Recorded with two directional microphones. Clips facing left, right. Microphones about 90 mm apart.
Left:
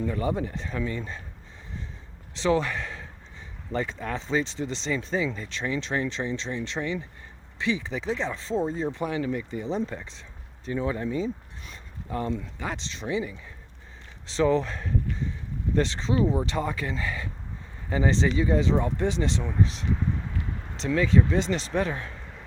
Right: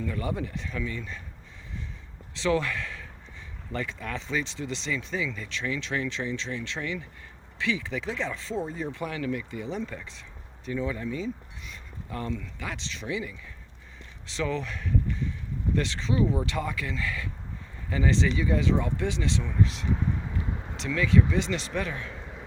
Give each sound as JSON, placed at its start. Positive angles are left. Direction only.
{"t": 0.0, "sound": "speech", "side_deg": 30}
{"t": 2.3, "sound": "speech", "side_deg": 30}